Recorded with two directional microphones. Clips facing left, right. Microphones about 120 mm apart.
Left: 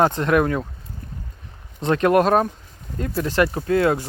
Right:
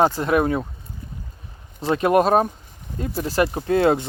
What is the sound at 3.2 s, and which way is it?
Speech, 35° right (ahead or behind).